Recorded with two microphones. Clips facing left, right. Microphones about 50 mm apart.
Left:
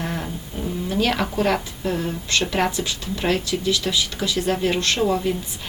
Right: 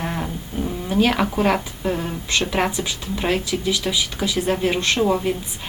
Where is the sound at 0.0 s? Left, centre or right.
Centre.